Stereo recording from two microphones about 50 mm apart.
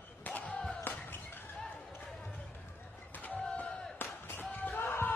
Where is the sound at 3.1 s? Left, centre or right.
Left.